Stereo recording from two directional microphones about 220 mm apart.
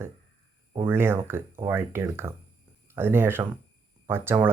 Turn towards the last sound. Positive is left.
turn(degrees=-10)  # may be behind; listen again after turning